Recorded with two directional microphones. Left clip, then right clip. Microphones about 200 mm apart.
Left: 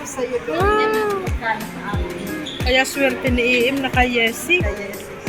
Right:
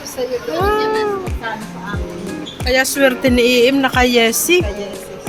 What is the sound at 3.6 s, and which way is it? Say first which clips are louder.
Speech: right 5 dB; 30° right (ahead or behind).